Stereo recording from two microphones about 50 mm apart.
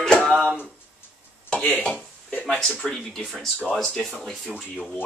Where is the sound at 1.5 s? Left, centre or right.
Left.